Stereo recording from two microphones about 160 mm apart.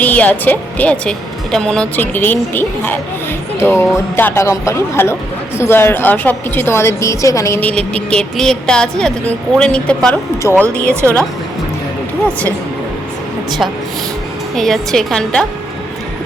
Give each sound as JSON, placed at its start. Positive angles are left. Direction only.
{"t": 0.0, "sound": "a woman's voice", "side_deg": 10}
{"t": 14.5, "sound": "a woman's voice", "side_deg": 0}